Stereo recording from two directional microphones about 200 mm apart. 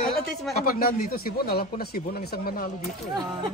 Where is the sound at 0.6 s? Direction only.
50° left (ahead or behind).